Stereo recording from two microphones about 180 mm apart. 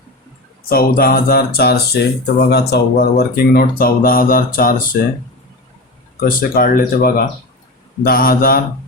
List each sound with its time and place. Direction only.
0.7 s speech: 55° left (ahead or behind)
6.1 s speech: 50° left (ahead or behind)